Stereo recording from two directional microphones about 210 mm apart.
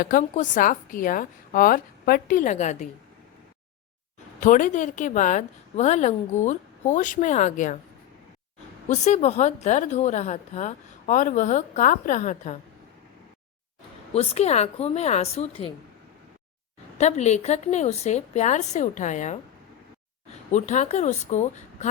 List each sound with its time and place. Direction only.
0.0 s a woman's voice: 40° left (ahead or behind)
4.4 s a woman's voice: 40° left (ahead or behind)
8.9 s a woman's voice: 35° left (ahead or behind)
14.1 s a woman's voice: 30° left (ahead or behind)
17.0 s a woman's voice: 30° left (ahead or behind)
20.5 s a woman's voice: 35° left (ahead or behind)